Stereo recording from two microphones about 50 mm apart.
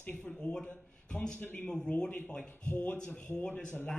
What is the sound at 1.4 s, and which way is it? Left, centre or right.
Speech, left.